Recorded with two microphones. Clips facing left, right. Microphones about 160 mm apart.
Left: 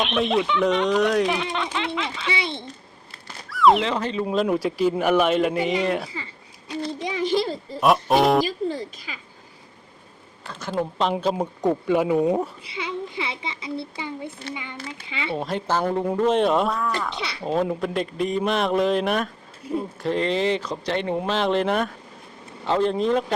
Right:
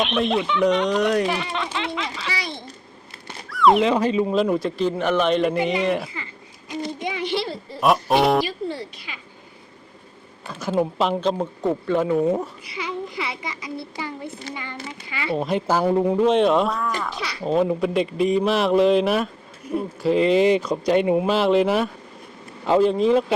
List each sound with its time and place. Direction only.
0.0 s speech: centre (ahead or behind)
2.3 s a sound: 25° left (ahead or behind)
3.5 s a sound: centre (ahead or behind)
3.8 s speech: 10° right (ahead or behind)
4.3 s speech: centre (ahead or behind)
6.7 s a sound: 35° left (ahead or behind)
7.8 s speech: centre (ahead or behind)
8.4 s music: 40° left (ahead or behind)
10.4 s speech: 10° right (ahead or behind)
11.1 s speech: 5° left (ahead or behind)
11.9 s a sound: 10° left (ahead or behind)
15.3 s speech: 5° right (ahead or behind)